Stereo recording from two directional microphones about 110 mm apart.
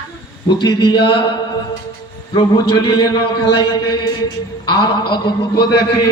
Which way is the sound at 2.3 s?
45° left (ahead or behind).